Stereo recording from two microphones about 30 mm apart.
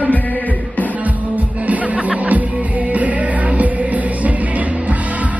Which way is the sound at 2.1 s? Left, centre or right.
Right.